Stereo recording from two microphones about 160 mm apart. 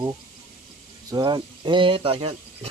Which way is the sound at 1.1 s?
25° right (ahead or behind).